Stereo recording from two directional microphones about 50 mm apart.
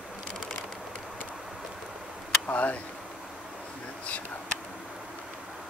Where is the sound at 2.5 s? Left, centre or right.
Left.